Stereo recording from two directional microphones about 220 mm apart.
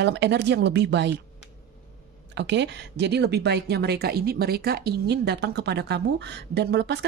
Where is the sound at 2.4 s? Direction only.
50° right (ahead or behind).